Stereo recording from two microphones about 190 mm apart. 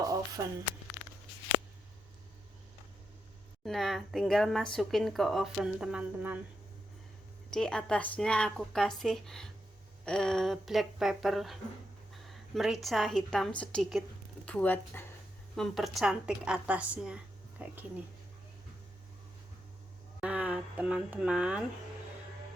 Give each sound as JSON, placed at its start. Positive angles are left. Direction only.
{"t": 0.0, "sound": "a sound", "side_deg": -20}
{"t": 3.6, "sound": "a woman's voice", "side_deg": 0}
{"t": 7.5, "sound": "a woman's voice", "side_deg": 5}
{"t": 20.2, "sound": "speech", "side_deg": -5}